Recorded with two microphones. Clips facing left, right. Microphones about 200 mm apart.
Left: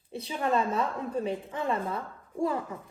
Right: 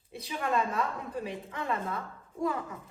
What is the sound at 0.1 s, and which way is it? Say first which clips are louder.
A woman's voice: left 3 dB; 30° left (ahead or behind).